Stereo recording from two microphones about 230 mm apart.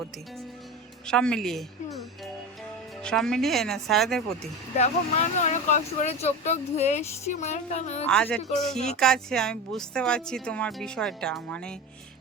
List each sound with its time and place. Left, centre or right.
1.0 s speech: centre
4.8 s speech: left
8.0 s speech: centre